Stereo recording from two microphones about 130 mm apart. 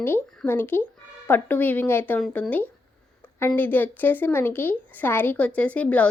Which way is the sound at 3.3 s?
15° left (ahead or behind).